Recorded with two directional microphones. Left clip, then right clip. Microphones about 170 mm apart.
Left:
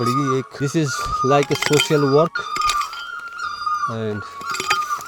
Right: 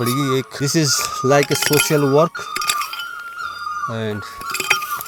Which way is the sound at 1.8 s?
5° left (ahead or behind).